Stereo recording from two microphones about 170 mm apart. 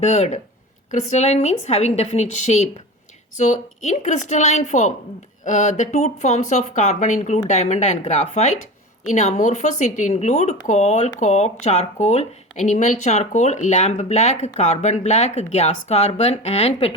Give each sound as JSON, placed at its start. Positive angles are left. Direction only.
{"t": 0.0, "sound": "speech", "side_deg": 40}